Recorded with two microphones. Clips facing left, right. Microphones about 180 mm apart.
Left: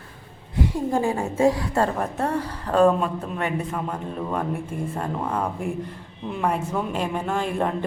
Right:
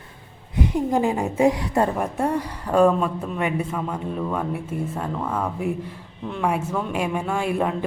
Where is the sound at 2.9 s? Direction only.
Centre (ahead or behind).